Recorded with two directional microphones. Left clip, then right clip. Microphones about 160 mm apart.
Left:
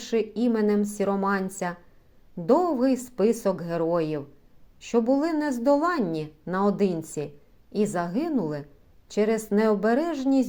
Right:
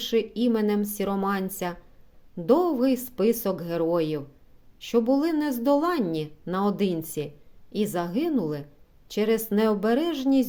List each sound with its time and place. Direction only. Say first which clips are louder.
0.0 s a woman's voice: right 1 dB; 15° right (ahead or behind)